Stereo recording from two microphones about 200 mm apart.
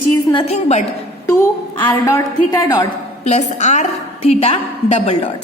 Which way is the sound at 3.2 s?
35° left (ahead or behind).